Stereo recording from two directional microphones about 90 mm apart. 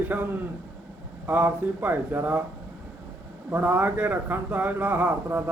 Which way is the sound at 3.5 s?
20° right (ahead or behind).